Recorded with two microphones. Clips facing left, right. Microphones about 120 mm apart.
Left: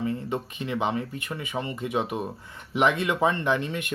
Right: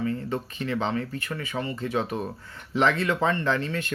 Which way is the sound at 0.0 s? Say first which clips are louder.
Even; 20° left (ahead or behind).